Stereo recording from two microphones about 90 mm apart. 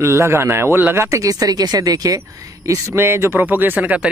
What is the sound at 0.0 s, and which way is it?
A man's voice, 30° right (ahead or behind).